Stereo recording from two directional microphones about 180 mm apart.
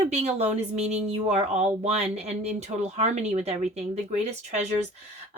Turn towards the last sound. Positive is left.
turn(degrees=-40)  # may be behind; listen again after turning